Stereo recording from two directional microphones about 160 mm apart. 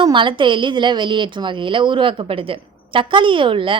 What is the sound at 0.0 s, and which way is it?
A woman's voice, 30° right (ahead or behind).